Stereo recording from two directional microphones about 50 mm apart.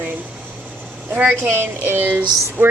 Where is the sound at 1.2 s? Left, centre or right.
Right.